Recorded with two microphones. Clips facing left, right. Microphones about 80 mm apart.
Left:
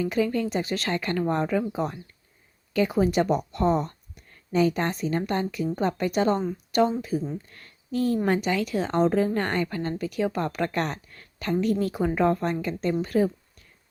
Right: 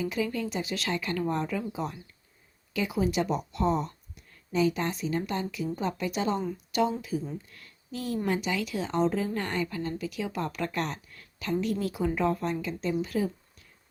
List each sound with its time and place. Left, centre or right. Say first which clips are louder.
0.0 s a woman's voice: left 5 dB; left